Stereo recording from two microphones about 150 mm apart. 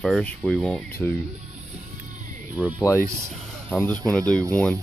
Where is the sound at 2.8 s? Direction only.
15° left (ahead or behind).